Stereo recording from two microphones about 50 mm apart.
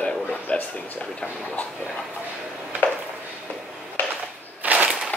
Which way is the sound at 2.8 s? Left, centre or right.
Left.